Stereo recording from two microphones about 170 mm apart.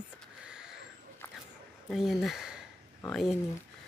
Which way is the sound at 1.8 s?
Centre (ahead or behind).